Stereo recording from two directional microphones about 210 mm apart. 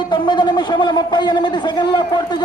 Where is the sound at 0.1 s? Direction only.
20° left (ahead or behind).